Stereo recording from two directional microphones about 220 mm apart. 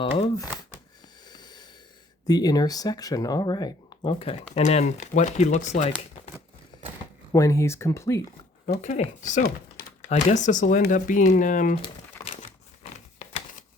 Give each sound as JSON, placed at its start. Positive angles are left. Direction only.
{"t": 0.0, "sound": "speech", "side_deg": 25}
{"t": 1.3, "sound": "a sound", "side_deg": 20}
{"t": 2.2, "sound": "speech", "side_deg": 20}
{"t": 7.3, "sound": "speech", "side_deg": 15}
{"t": 8.6, "sound": "speech", "side_deg": 35}
{"t": 12.8, "sound": "a sound", "side_deg": 30}